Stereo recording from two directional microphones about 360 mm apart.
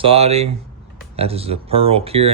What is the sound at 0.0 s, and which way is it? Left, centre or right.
Speech, centre.